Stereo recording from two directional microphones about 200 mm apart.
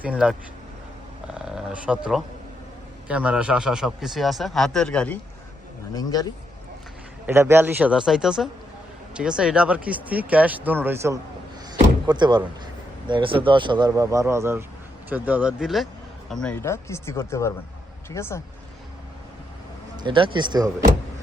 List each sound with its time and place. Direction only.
0.0 s a man's voice: 5° right (ahead or behind)
5.9 s a man's voice: 20° left (ahead or behind)
7.3 s speech: 10° right (ahead or behind)
11.7 s door: 20° right (ahead or behind)
13.1 s a man's voice: 25° right (ahead or behind); by 18.4 s 15° left (ahead or behind)
20.0 s speech: 25° right (ahead or behind)